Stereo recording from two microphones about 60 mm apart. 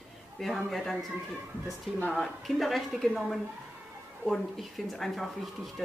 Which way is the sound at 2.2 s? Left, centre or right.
Centre.